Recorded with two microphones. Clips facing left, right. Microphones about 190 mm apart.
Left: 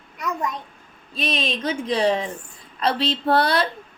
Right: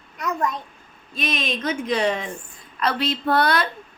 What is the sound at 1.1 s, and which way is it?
Speech, 30° left (ahead or behind).